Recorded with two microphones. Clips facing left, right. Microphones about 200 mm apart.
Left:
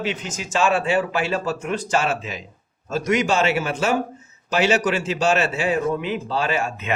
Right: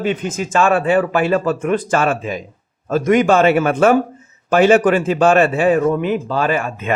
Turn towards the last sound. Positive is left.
turn(degrees=-50)  # may be behind; listen again after turning